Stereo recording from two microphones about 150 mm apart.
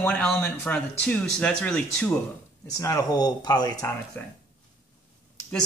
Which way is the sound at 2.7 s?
20° left (ahead or behind).